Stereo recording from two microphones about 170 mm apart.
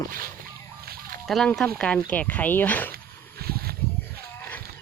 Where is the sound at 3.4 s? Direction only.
65° right (ahead or behind).